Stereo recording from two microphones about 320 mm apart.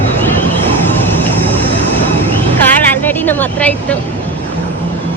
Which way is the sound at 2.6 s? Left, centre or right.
Centre.